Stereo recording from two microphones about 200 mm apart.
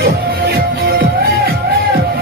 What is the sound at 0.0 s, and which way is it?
Music, 50° right (ahead or behind).